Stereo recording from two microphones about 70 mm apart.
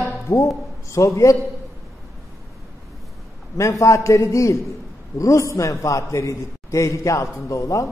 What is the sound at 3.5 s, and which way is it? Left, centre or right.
A man's voice, left.